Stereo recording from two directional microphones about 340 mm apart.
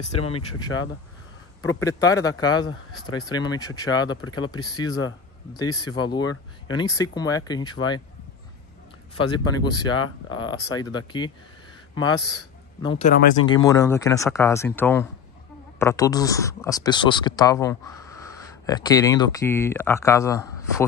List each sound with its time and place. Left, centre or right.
0.2 s speech: centre
1.8 s speech: centre
9.1 s speech: centre
13.5 s speech: centre